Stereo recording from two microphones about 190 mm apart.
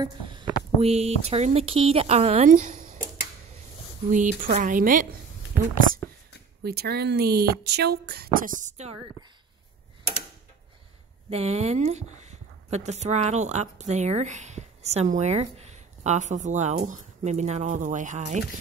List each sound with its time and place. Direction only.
0.0 s a sound: 20° right (ahead or behind)
0.7 s speech: 35° right (ahead or behind)
4.1 s a woman's voice: 40° right (ahead or behind)
6.6 s speech: 55° right (ahead or behind); by 8.9 s 40° right (ahead or behind)
11.2 s speech: 35° right (ahead or behind)